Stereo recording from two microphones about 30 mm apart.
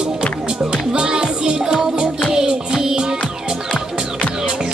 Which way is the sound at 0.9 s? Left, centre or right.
Right.